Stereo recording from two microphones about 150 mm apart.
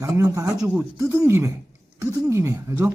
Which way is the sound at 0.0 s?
20° right (ahead or behind).